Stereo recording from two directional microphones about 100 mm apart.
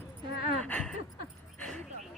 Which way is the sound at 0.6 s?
15° left (ahead or behind).